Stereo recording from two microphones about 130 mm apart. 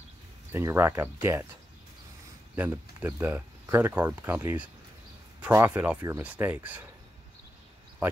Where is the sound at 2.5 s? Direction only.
15° right (ahead or behind).